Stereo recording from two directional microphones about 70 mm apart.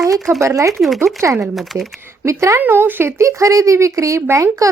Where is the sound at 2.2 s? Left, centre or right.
Right.